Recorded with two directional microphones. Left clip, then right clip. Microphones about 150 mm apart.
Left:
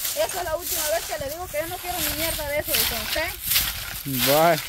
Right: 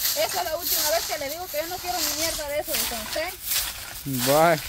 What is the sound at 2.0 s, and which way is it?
Speech, 15° left (ahead or behind).